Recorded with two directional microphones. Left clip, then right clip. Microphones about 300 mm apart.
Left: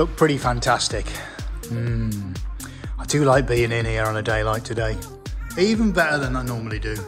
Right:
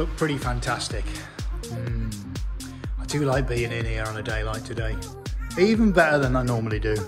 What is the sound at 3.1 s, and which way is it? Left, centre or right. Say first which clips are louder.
Speech: left 7 dB; left.